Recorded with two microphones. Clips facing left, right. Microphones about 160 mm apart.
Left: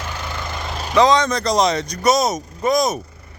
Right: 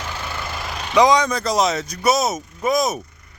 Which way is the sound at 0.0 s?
15° left (ahead or behind).